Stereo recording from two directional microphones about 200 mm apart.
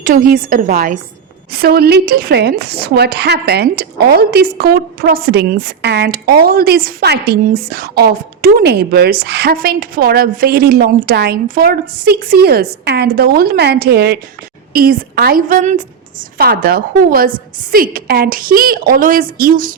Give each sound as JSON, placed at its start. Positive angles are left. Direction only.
{"t": 0.0, "sound": "speech", "side_deg": -45}